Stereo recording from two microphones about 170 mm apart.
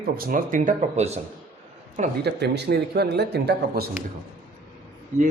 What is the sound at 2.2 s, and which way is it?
Speech, 70° right (ahead or behind).